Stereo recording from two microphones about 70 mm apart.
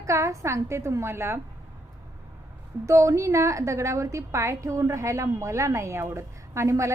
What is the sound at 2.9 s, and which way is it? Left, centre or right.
A woman's voice, right.